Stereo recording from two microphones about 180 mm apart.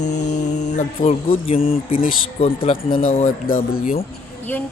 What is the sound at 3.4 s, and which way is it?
Speech, 55° left (ahead or behind).